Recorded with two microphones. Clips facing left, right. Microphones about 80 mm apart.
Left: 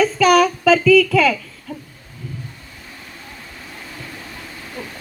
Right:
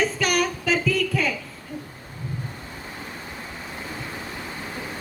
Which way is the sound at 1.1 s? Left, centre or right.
Left.